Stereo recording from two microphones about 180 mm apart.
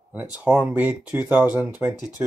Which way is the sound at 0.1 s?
5° right (ahead or behind).